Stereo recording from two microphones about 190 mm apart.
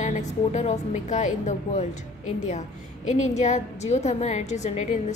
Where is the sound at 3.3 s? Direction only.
35° left (ahead or behind).